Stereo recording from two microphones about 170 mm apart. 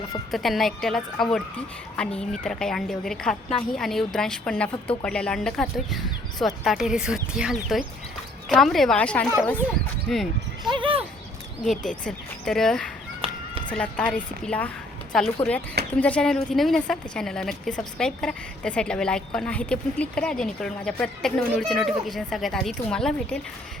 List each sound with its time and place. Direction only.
0.3 s a woman's voice: centre (ahead or behind)
10.6 s speech: 25° right (ahead or behind)
11.9 s a woman's voice: 5° left (ahead or behind)